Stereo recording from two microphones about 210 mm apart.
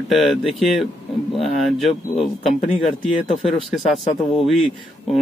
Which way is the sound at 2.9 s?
35° left (ahead or behind).